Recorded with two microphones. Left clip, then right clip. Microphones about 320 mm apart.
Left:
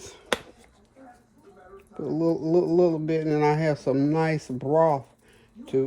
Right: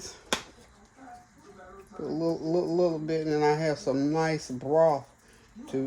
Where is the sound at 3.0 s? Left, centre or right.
Left.